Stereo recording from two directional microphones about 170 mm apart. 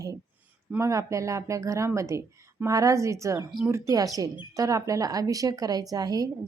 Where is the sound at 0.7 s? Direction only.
15° right (ahead or behind).